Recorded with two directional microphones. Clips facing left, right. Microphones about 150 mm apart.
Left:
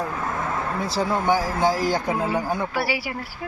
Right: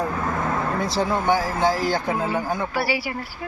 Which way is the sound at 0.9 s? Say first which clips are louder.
Even; 10° left (ahead or behind).